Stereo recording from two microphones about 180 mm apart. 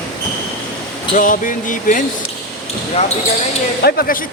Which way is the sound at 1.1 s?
50° left (ahead or behind).